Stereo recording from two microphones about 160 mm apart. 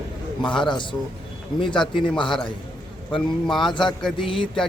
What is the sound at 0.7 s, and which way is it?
Speech, 30° left (ahead or behind).